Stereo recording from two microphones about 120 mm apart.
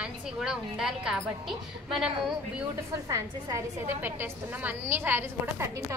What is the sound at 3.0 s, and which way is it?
A woman's voice, 25° right (ahead or behind).